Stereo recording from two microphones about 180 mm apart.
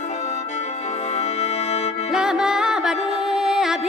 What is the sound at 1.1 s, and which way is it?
Music, 35° left (ahead or behind).